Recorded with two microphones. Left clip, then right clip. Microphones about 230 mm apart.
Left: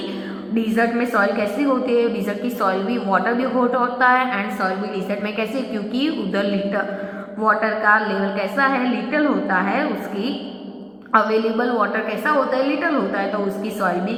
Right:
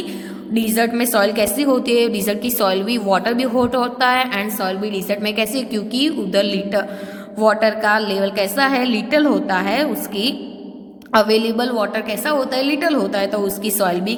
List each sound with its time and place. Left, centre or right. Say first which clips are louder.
0.5 s a woman's voice: right 1 dB; right